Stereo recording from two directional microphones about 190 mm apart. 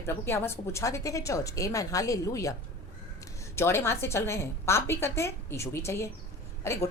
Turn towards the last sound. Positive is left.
turn(degrees=15)  # may be behind; listen again after turning